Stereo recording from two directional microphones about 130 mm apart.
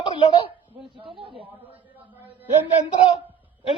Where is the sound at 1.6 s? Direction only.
15° right (ahead or behind).